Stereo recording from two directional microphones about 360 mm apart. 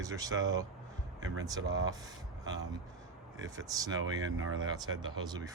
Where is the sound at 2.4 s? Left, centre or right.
Centre.